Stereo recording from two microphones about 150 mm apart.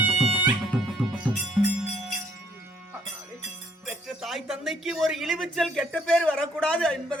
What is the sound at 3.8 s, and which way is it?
Music, centre (ahead or behind).